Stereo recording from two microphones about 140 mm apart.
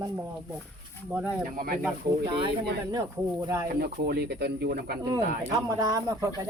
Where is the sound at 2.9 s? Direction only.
25° right (ahead or behind).